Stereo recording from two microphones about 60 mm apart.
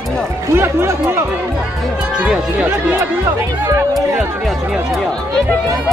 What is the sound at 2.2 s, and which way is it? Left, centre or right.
Speech, centre.